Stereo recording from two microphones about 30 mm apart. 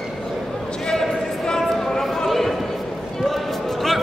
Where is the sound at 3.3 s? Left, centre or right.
Centre.